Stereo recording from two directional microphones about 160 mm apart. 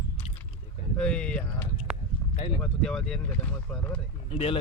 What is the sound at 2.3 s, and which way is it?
Speech, 40° left (ahead or behind).